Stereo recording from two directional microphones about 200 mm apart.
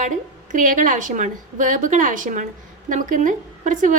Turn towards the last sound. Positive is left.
turn(degrees=-40)  # may be behind; listen again after turning